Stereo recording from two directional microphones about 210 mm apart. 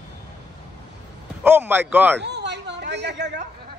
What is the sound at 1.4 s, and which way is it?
Speech, 10° right (ahead or behind).